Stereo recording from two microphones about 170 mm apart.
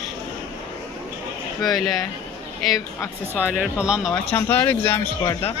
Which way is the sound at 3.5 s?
5° right (ahead or behind).